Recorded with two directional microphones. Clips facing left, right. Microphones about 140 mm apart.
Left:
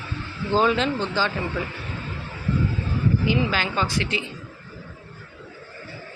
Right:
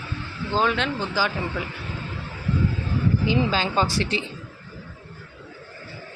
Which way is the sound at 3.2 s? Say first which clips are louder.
Right 1 dB; 25° right (ahead or behind).